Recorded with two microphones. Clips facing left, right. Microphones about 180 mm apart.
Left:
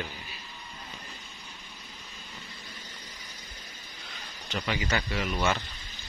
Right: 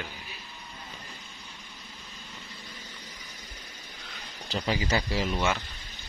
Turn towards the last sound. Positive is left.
turn(degrees=-30)  # may be behind; listen again after turning